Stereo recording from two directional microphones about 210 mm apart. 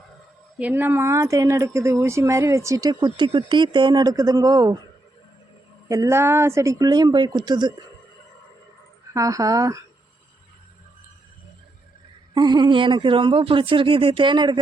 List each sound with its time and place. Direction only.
0.6 s speech: 10° right (ahead or behind)
5.9 s speech: 15° right (ahead or behind)
9.1 s speech: 15° right (ahead or behind)
12.3 s speech: 20° right (ahead or behind)